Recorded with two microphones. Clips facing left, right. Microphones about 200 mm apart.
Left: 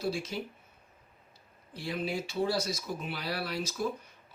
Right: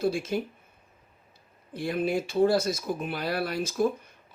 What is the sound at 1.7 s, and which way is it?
Speech, 50° right (ahead or behind).